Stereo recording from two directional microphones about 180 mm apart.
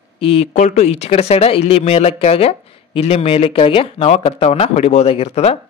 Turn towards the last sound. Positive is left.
turn(degrees=35)  # may be behind; listen again after turning